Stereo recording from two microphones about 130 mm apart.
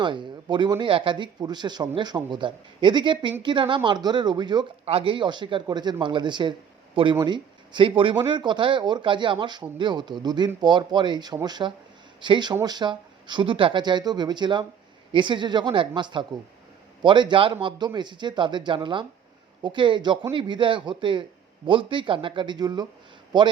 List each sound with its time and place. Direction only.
0.0 s speech: 35° right (ahead or behind)